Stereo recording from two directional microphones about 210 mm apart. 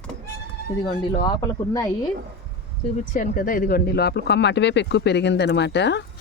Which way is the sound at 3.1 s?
40° left (ahead or behind).